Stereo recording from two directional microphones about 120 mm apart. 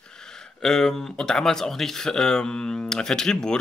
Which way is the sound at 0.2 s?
5° left (ahead or behind).